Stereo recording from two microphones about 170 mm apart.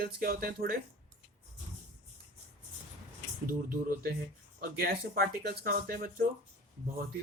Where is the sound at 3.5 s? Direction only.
60° right (ahead or behind).